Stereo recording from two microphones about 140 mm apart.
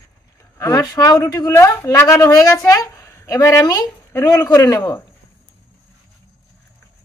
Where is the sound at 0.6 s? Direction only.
20° left (ahead or behind).